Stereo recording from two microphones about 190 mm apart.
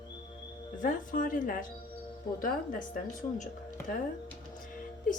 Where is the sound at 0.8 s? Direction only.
45° left (ahead or behind).